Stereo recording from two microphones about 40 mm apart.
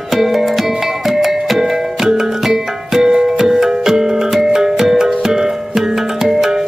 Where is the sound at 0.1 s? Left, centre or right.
Centre.